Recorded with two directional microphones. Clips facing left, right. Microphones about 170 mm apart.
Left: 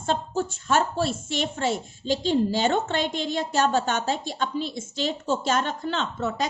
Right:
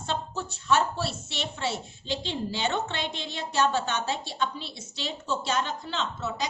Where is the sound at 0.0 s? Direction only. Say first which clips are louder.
Left 6 dB; 45° left (ahead or behind).